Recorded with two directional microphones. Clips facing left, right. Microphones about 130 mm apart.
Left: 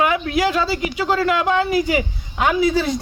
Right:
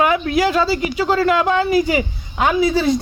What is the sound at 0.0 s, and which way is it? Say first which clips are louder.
Speech: right 2 dB; 40° right (ahead or behind).